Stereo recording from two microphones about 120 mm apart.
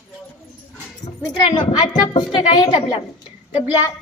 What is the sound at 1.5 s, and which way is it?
A woman's voice, 40° left (ahead or behind).